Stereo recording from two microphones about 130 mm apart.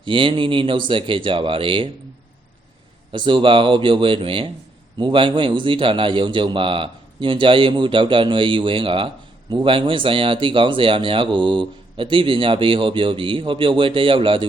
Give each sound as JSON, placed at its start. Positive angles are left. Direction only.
{"t": 0.0, "sound": "speech", "side_deg": -40}
{"t": 3.1, "sound": "speech", "side_deg": -40}